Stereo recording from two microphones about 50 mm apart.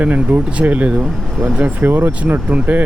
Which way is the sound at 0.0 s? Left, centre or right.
Right.